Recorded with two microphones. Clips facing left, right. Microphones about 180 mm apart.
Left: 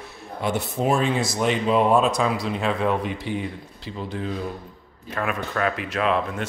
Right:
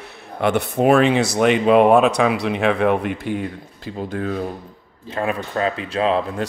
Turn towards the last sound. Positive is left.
turn(degrees=-30)  # may be behind; listen again after turning